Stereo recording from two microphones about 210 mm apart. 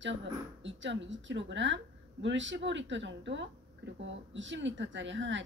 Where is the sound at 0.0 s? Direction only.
60° right (ahead or behind).